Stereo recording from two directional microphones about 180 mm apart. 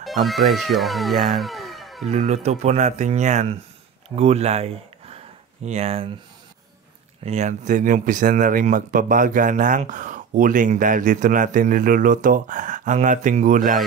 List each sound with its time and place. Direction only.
0.0 s speech: centre (ahead or behind)
1.3 s music: centre (ahead or behind)
2.0 s speech: 40° right (ahead or behind)
7.2 s speech: 40° right (ahead or behind)